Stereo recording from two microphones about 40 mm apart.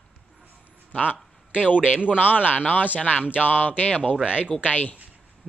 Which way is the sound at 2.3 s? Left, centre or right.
Left.